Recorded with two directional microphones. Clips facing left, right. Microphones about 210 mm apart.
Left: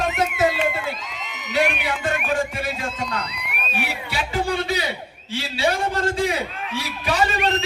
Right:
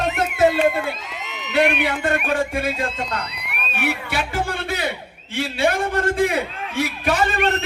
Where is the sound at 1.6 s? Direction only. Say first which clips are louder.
Right 4 dB; 50° right (ahead or behind).